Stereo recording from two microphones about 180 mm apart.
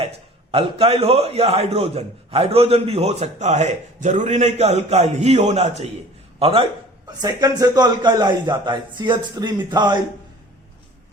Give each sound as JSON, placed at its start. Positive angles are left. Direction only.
{"t": 0.5, "sound": "a man's voice", "side_deg": -35}
{"t": 7.2, "sound": "a man's voice", "side_deg": -20}